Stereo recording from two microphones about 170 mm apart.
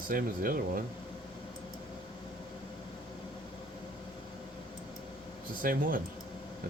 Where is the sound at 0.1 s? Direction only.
55° right (ahead or behind).